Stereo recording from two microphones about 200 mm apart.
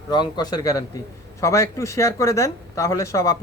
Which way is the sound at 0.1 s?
20° left (ahead or behind).